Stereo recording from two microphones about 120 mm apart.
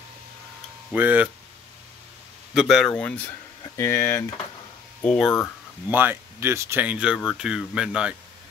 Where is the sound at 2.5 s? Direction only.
Centre (ahead or behind).